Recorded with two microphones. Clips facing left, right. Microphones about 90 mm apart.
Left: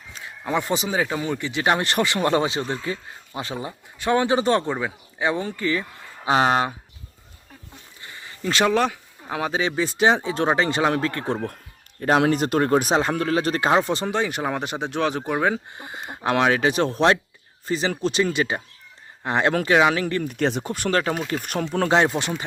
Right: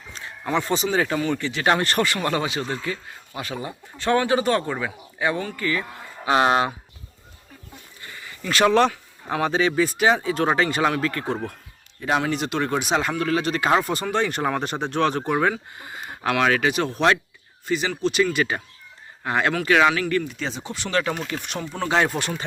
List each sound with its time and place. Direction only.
0.1 s a man's voice: 10° left (ahead or behind); by 5.8 s 25° left (ahead or behind)
8.0 s a sound: 25° left (ahead or behind)
8.7 s speech: 10° left (ahead or behind); by 11.3 s 30° left (ahead or behind)
11.9 s speech: 45° left (ahead or behind)
13.7 s speech: 25° left (ahead or behind)
15.5 s a sound: 25° left (ahead or behind)
16.4 s speech: 25° left (ahead or behind)
20.2 s speech: 60° left (ahead or behind)
21.8 s speech: 25° left (ahead or behind)